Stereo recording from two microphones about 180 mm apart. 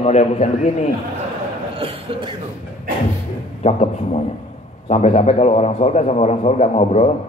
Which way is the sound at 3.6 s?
40° left (ahead or behind).